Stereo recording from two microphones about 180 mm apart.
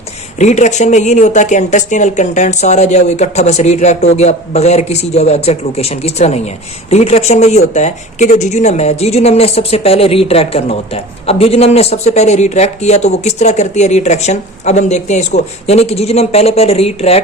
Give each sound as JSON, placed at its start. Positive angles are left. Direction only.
{"t": 0.3, "sound": "speech", "side_deg": 40}